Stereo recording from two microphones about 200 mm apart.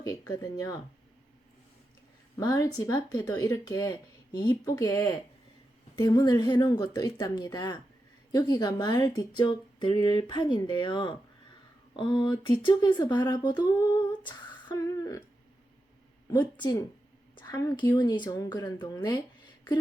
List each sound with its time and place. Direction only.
0.0 s speech: 20° left (ahead or behind)
2.4 s speech: 20° left (ahead or behind)
13.7 s humming: 20° left (ahead or behind)
16.3 s speech: 20° left (ahead or behind)